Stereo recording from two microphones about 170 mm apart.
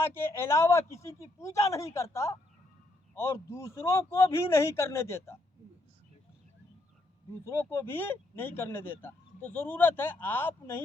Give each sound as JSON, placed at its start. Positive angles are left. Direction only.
{"t": 0.0, "sound": "speech", "side_deg": 15}
{"t": 7.4, "sound": "speech", "side_deg": 15}